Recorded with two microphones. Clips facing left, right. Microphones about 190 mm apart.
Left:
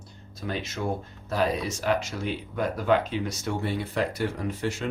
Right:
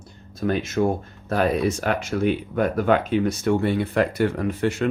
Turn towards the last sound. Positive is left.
turn(degrees=-60)  # may be behind; listen again after turning